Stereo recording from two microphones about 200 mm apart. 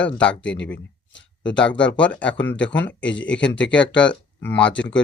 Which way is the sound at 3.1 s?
65° left (ahead or behind).